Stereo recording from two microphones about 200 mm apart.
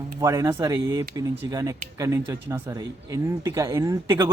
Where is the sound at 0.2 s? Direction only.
15° right (ahead or behind).